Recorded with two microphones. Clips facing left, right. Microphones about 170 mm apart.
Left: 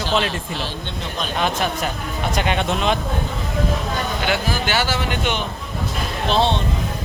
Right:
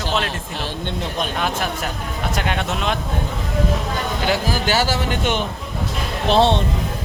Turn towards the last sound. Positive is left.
turn(degrees=-65)  # may be behind; listen again after turning